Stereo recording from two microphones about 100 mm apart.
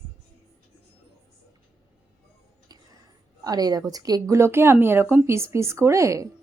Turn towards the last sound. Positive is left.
turn(degrees=-30)  # may be behind; listen again after turning